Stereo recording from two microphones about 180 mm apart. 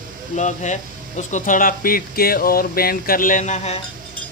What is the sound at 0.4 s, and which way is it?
Speech, 40° left (ahead or behind).